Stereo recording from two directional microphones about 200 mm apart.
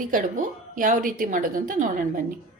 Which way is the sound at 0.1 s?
40° right (ahead or behind).